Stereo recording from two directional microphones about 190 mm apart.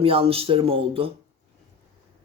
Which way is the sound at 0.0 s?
30° right (ahead or behind).